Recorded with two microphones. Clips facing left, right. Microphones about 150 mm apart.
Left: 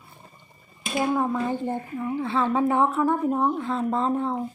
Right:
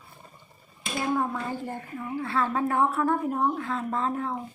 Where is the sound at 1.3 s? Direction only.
20° left (ahead or behind).